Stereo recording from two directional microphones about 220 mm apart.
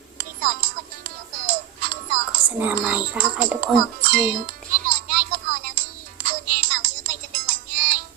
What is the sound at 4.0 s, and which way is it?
Speech, 40° right (ahead or behind).